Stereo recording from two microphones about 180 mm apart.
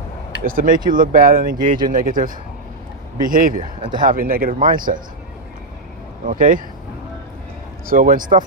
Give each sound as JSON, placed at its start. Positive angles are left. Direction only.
{"t": 0.4, "sound": "speech", "side_deg": -50}
{"t": 6.2, "sound": "speech", "side_deg": -45}
{"t": 7.9, "sound": "speech", "side_deg": -50}